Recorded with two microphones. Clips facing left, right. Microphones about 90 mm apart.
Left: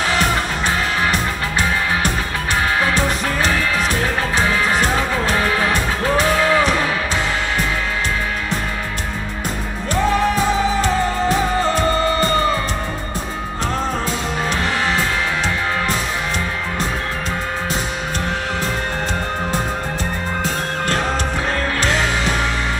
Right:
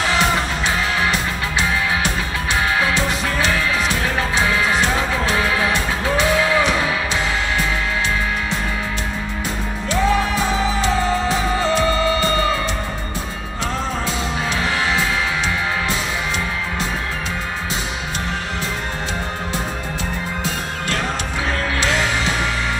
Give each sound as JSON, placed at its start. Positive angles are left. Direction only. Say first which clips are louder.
{"t": 0.2, "sound": "music", "louder": "even", "side_deg": 45}
{"t": 3.4, "sound": "music", "louder": "left 1 dB", "side_deg": 45}
{"t": 10.3, "sound": "music", "louder": "left 2 dB", "side_deg": 45}